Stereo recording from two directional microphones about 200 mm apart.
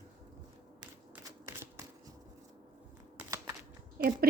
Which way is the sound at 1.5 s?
15° right (ahead or behind).